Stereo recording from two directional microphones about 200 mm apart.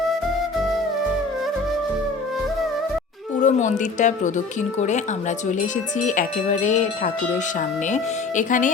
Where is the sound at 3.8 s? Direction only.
40° left (ahead or behind).